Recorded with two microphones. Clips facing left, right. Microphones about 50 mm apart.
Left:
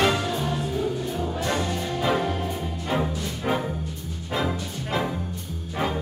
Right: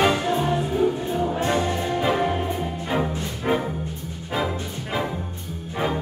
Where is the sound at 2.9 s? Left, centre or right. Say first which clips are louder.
Right 1 dB; centre.